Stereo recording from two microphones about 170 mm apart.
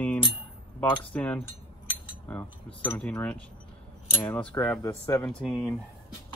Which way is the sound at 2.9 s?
10° left (ahead or behind).